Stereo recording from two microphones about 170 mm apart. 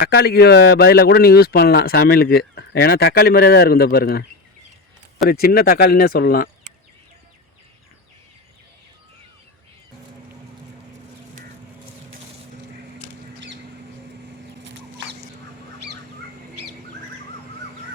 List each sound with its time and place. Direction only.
0.0 s speech: 65° left (ahead or behind)
5.3 s speech: 65° left (ahead or behind)
14.6 s chicken: 90° right